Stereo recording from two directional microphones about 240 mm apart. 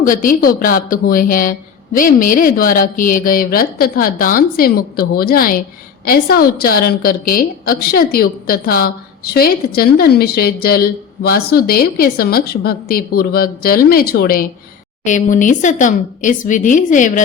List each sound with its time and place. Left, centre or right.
0.0 s a woman's voice: left